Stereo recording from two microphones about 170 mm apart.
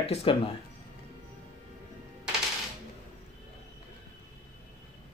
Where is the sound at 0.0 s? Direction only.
35° left (ahead or behind).